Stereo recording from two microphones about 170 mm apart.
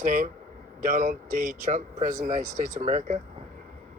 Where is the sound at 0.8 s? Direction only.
45° right (ahead or behind).